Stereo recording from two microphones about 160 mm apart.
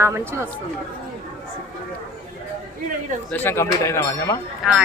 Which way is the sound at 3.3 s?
15° left (ahead or behind).